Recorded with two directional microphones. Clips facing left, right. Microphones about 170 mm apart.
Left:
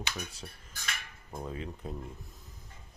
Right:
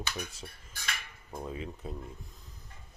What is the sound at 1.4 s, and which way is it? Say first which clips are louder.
Speech: even; 5° right (ahead or behind).